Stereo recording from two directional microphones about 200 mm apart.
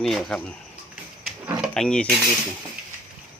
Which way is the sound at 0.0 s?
Centre (ahead or behind).